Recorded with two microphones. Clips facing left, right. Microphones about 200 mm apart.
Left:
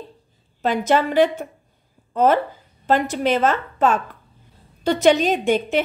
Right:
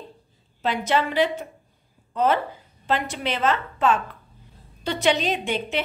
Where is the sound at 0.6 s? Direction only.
45° left (ahead or behind).